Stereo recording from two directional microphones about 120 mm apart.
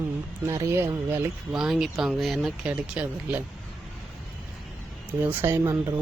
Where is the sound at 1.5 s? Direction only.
5° right (ahead or behind).